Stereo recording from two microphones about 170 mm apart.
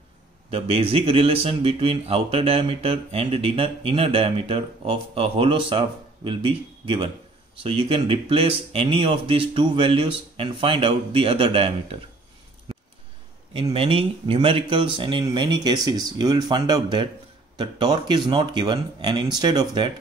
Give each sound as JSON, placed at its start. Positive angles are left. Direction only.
{"t": 0.5, "sound": "speech", "side_deg": -35}
{"t": 13.7, "sound": "speech", "side_deg": -30}